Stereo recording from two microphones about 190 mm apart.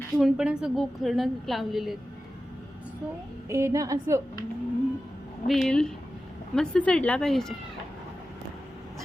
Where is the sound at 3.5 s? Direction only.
15° right (ahead or behind).